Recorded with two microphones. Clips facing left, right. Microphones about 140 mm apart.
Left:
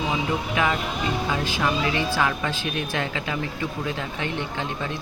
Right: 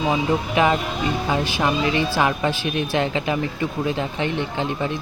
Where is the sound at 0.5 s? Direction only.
25° right (ahead or behind).